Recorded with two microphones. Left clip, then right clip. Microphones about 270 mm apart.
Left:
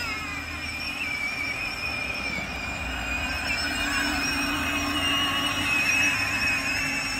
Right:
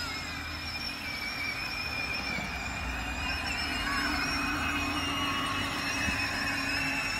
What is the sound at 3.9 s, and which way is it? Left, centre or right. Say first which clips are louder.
Vehicle: left 3 dB; left.